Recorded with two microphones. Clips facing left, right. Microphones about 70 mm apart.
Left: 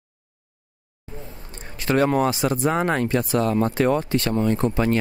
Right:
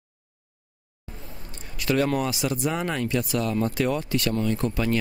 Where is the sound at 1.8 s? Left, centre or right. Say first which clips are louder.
Left 4 dB; left.